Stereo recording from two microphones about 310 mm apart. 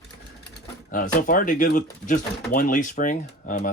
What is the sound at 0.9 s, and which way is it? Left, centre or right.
Speech, left.